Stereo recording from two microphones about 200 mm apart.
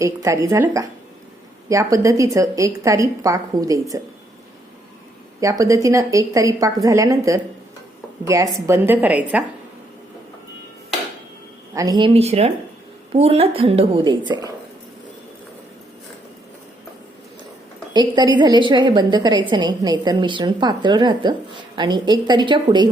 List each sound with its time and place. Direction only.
0.0 s a woman's voice: 15° right (ahead or behind)
5.4 s a woman's voice: 15° right (ahead or behind)
11.7 s a woman's voice: 15° right (ahead or behind)
17.9 s a woman's voice: 20° right (ahead or behind)